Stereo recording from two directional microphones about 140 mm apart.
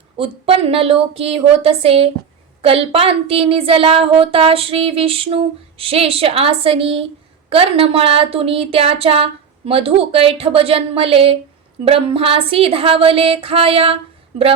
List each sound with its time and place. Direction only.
0.2 s speech: 40° right (ahead or behind)
11.9 s music: 40° right (ahead or behind)